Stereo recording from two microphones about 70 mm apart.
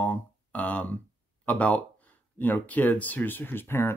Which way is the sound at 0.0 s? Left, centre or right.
Left.